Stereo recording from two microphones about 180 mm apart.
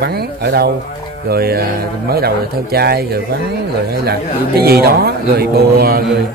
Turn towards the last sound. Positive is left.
turn(degrees=-60)  # may be behind; listen again after turning